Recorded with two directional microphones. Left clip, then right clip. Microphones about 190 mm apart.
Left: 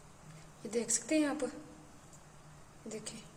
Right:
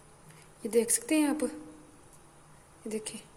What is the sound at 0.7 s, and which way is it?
Speech, 45° right (ahead or behind).